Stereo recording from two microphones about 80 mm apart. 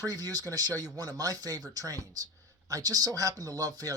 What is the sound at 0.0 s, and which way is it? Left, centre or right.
Speech, right.